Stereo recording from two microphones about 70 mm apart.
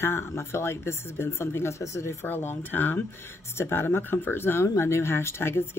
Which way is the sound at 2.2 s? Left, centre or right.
Left.